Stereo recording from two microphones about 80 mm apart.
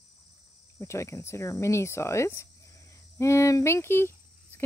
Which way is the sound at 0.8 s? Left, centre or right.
Left.